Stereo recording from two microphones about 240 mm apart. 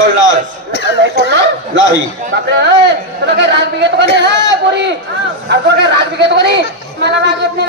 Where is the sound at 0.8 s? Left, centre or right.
Left.